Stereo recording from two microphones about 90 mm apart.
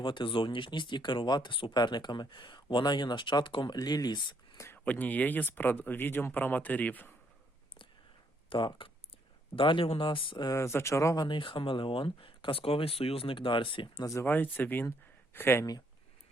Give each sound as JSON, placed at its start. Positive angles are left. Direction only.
{"t": 0.0, "sound": "speech", "side_deg": 65}
{"t": 1.7, "sound": "speech", "side_deg": 55}
{"t": 3.8, "sound": "speech", "side_deg": 50}
{"t": 4.5, "sound": "a sound", "side_deg": 30}
{"t": 4.9, "sound": "speech", "side_deg": 20}
{"t": 8.4, "sound": "speech", "side_deg": 70}
{"t": 10.4, "sound": "speech", "side_deg": 35}
{"t": 11.2, "sound": "speech", "side_deg": 65}
{"t": 14.0, "sound": "speech", "side_deg": 40}
{"t": 14.3, "sound": "speech", "side_deg": 20}